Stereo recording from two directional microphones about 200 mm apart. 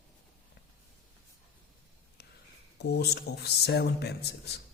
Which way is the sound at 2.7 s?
55° left (ahead or behind).